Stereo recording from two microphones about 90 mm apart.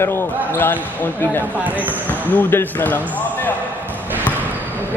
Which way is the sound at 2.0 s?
20° left (ahead or behind).